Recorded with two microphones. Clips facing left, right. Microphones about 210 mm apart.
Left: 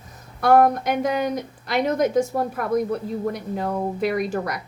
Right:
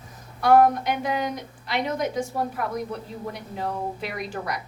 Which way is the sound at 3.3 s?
45° left (ahead or behind).